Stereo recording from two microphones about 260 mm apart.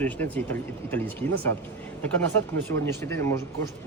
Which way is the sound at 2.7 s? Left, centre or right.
Centre.